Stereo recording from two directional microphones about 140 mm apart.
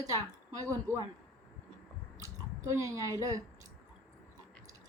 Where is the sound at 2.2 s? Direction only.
20° right (ahead or behind).